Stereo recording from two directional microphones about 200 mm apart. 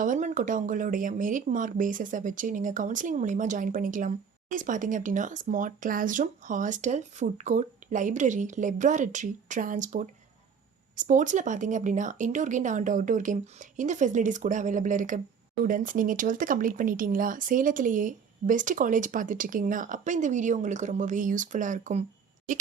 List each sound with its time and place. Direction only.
0.0 s speech: 40° right (ahead or behind)